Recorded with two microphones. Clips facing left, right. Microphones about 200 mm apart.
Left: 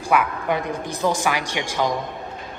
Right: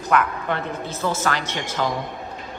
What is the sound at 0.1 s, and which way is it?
A woman's voice, 10° left (ahead or behind).